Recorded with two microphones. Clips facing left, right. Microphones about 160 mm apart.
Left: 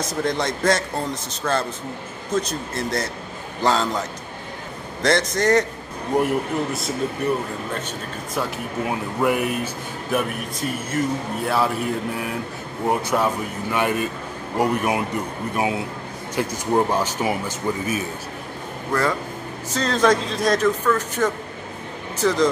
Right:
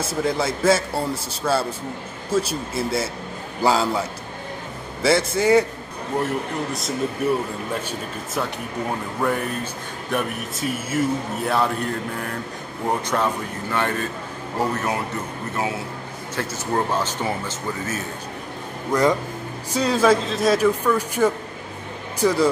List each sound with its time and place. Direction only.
0.0 s a man's voice: 5° right (ahead or behind)
5.0 s a man's voice: 5° right (ahead or behind)
8.4 s speech: 10° left (ahead or behind)
10.1 s a man's voice: centre (ahead or behind)
18.9 s speech: 20° right (ahead or behind)